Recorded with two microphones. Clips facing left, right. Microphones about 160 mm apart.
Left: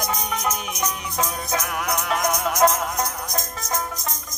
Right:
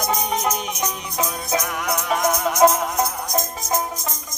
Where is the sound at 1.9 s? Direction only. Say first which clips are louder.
Right 3 dB; 5° right (ahead or behind).